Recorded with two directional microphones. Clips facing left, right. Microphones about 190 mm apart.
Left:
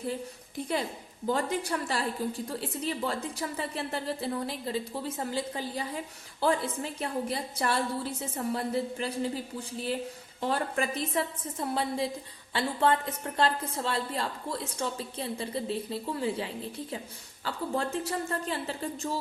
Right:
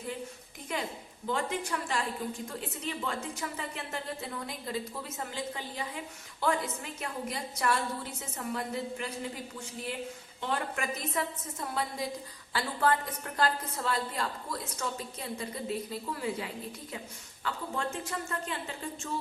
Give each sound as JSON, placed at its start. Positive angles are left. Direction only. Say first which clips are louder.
{"t": 1.3, "sound": "a woman's voice", "louder": "left 3 dB", "side_deg": 35}